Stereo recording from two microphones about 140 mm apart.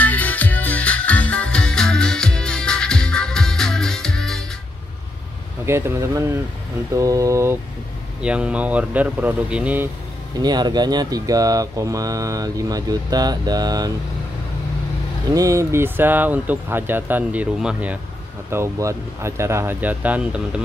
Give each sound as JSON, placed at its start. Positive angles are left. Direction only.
{"t": 0.0, "sound": "music", "side_deg": 10}
{"t": 5.7, "sound": "speech", "side_deg": -20}
{"t": 8.2, "sound": "speech", "side_deg": -5}
{"t": 10.4, "sound": "speech", "side_deg": -30}
{"t": 15.3, "sound": "speech", "side_deg": -20}
{"t": 18.5, "sound": "speech", "side_deg": -20}